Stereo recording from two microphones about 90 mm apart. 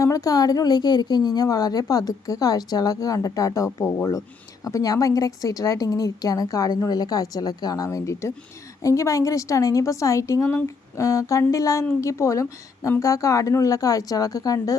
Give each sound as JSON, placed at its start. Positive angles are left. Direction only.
{"t": 0.0, "sound": "a woman's voice", "side_deg": 40}
{"t": 7.9, "sound": "a woman's voice", "side_deg": 35}